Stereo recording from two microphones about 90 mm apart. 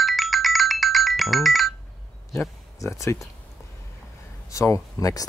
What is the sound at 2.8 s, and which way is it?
Speech, 35° left (ahead or behind).